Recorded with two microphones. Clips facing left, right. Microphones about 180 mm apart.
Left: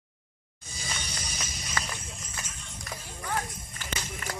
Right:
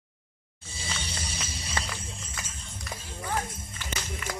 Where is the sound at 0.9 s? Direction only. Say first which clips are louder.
Right 2 dB; 30° right (ahead or behind).